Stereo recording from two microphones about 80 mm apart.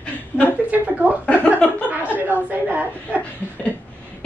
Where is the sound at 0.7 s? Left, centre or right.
Centre.